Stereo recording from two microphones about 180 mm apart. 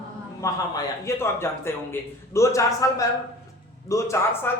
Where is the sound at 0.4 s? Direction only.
15° left (ahead or behind).